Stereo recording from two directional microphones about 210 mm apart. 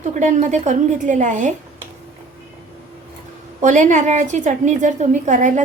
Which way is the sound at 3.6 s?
35° right (ahead or behind).